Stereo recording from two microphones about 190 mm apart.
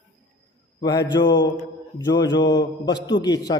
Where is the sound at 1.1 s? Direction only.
20° left (ahead or behind).